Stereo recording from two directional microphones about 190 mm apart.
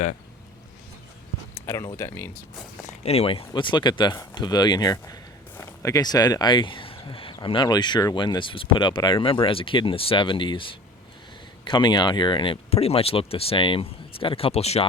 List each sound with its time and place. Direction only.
1.5 s speech: 15° left (ahead or behind)
2.8 s speech: 30° left (ahead or behind)